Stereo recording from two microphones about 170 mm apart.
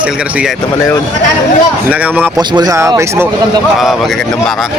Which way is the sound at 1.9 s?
10° right (ahead or behind).